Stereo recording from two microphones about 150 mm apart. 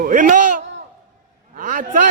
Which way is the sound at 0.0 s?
60° right (ahead or behind).